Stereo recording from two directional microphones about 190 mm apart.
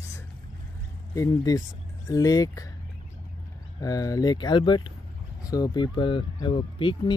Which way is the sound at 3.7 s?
20° left (ahead or behind).